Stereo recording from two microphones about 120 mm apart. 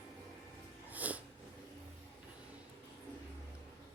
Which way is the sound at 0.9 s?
15° right (ahead or behind).